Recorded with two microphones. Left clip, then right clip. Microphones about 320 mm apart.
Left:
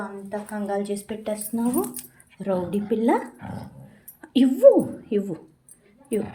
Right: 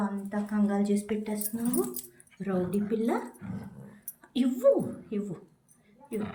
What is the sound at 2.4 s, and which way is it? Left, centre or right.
Speech, left.